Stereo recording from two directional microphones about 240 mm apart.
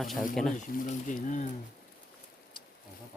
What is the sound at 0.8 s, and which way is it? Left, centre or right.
Speech, left.